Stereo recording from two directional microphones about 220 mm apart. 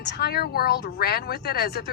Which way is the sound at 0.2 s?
45° left (ahead or behind).